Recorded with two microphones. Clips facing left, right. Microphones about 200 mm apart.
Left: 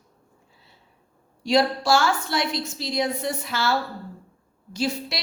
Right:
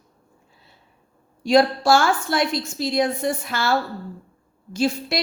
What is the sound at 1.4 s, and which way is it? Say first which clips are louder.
A woman's voice: right 4 dB; 50° right (ahead or behind).